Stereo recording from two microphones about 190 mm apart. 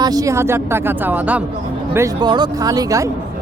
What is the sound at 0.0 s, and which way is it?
Speech, 20° right (ahead or behind).